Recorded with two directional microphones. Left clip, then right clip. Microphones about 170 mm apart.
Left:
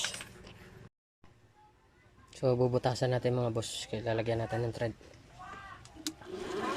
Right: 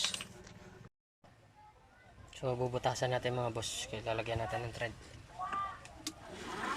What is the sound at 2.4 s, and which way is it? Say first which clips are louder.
Speech: left 6 dB; 30° left (ahead or behind).